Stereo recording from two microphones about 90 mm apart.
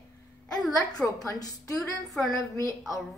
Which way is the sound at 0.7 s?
40° left (ahead or behind).